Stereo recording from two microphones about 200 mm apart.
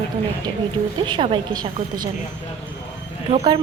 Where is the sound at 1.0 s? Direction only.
25° right (ahead or behind).